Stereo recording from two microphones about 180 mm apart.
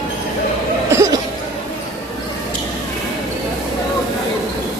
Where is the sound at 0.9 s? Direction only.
15° right (ahead or behind).